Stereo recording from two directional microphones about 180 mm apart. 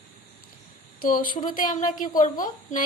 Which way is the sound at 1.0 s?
50° left (ahead or behind).